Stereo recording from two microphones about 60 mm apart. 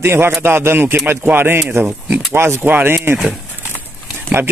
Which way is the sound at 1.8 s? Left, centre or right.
Right.